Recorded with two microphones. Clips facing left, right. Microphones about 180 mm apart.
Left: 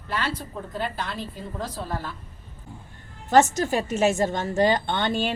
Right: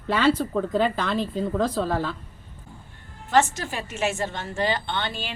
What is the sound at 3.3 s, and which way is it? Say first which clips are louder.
A woman's voice: left 3 dB; 40° left (ahead or behind).